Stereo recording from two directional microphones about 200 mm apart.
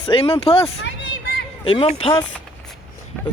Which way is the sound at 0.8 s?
65° left (ahead or behind).